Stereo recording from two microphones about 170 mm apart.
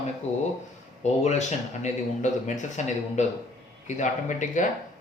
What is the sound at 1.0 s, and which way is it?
Speech, 40° left (ahead or behind).